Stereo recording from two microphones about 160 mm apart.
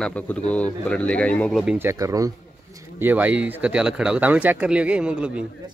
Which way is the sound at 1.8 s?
20° right (ahead or behind).